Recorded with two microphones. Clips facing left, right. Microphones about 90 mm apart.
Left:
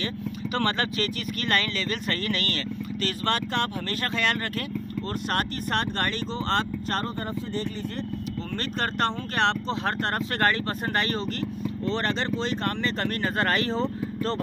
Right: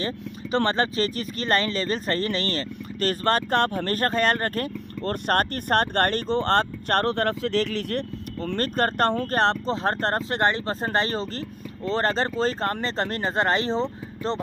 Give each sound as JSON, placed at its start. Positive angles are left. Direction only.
{"t": 0.0, "sound": "speech", "side_deg": -30}
{"t": 3.0, "sound": "speech", "side_deg": -40}
{"t": 8.5, "sound": "speech", "side_deg": -45}